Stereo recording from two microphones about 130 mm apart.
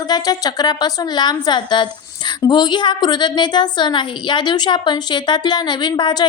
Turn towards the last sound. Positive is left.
turn(degrees=35)  # may be behind; listen again after turning